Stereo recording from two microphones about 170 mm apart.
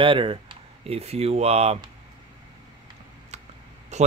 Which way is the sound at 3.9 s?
40° right (ahead or behind).